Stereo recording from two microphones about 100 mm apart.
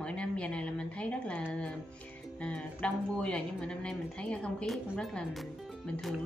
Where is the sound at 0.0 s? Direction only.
10° left (ahead or behind).